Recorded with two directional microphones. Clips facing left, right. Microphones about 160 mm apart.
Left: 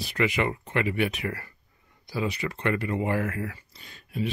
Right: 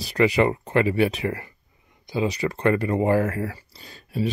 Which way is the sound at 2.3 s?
40° right (ahead or behind).